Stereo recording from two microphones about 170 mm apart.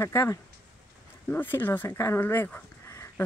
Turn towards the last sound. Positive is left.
turn(degrees=15)  # may be behind; listen again after turning